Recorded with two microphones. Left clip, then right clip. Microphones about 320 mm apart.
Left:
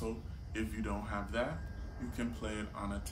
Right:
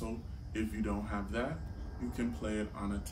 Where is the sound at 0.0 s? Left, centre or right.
Centre.